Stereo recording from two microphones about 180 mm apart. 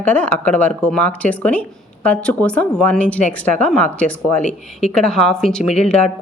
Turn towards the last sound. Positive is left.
turn(degrees=5)  # may be behind; listen again after turning